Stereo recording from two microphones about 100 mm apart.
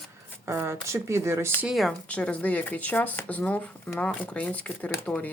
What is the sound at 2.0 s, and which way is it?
Speech, 15° left (ahead or behind).